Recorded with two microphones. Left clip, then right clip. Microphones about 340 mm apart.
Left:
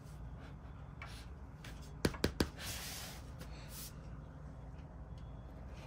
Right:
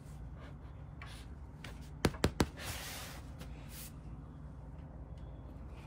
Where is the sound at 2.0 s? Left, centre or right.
Centre.